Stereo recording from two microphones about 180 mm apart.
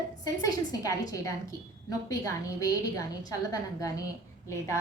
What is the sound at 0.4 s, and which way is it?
A woman's voice, 20° left (ahead or behind).